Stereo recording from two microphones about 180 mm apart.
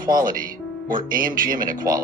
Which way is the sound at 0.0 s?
50° right (ahead or behind).